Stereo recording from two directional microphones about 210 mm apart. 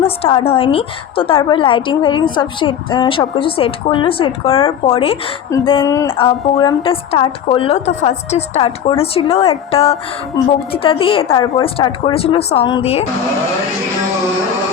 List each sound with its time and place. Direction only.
0.0 s a woman's voice: 30° left (ahead or behind)
5.8 s a sound: 15° left (ahead or behind)
6.1 s a woman's voice: 25° left (ahead or behind)